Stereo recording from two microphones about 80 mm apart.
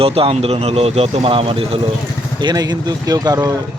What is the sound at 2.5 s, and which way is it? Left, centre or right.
Speech, right.